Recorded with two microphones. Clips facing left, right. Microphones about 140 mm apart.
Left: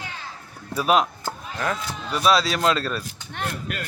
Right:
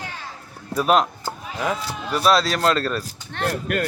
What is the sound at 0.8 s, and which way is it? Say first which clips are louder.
Speech: right 2 dB; centre (ahead or behind).